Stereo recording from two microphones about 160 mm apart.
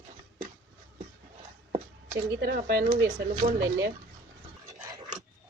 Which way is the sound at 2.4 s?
70° right (ahead or behind).